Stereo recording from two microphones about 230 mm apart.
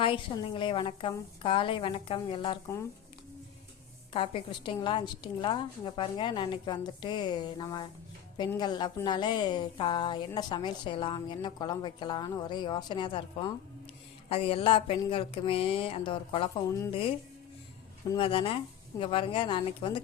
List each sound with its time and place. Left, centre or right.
0.0 s a woman's voice: left
4.1 s a woman's voice: left
18.1 s a woman's voice: left